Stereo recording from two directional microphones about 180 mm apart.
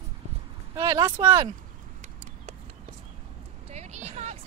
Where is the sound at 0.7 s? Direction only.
20° right (ahead or behind).